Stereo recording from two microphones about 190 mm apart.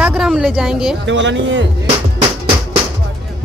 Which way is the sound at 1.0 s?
70° right (ahead or behind).